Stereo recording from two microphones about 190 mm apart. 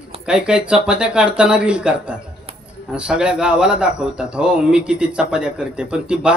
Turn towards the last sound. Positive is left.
turn(degrees=-5)  # may be behind; listen again after turning